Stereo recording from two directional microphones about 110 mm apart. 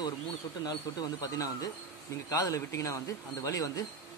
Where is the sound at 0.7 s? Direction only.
40° left (ahead or behind).